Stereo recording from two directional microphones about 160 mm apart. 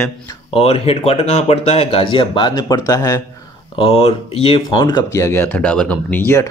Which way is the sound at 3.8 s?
35° left (ahead or behind).